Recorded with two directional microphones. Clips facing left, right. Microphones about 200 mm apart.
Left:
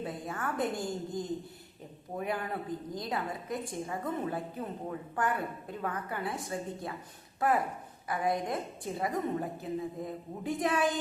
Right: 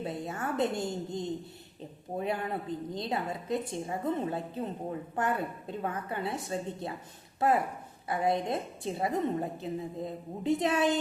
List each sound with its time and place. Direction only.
0.0 s a woman's voice: 25° right (ahead or behind)